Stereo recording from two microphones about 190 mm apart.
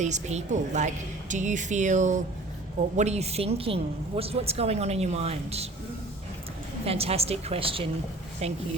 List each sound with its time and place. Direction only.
0.0 s a woman's voice: 35° right (ahead or behind)
6.8 s a woman's voice: 30° right (ahead or behind)